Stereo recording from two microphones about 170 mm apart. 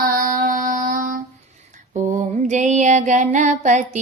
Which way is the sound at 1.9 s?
45° right (ahead or behind).